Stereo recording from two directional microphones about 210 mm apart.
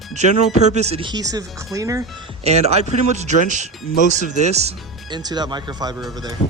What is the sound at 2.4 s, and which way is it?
Speech, 30° right (ahead or behind).